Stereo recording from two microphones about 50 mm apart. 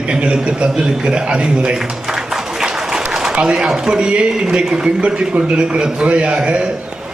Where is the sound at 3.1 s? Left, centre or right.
Centre.